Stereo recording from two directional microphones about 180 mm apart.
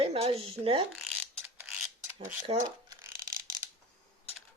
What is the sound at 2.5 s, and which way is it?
Speech, 30° right (ahead or behind).